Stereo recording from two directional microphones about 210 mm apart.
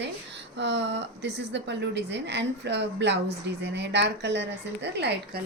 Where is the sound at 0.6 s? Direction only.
55° right (ahead or behind).